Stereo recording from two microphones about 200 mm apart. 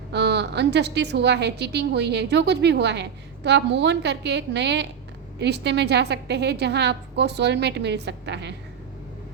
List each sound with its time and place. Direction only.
0.1 s a woman's voice: 55° right (ahead or behind)